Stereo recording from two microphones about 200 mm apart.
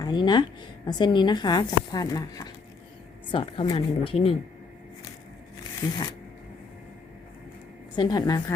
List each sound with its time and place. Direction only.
0.0 s speech: 20° left (ahead or behind)
7.9 s speech: 20° left (ahead or behind)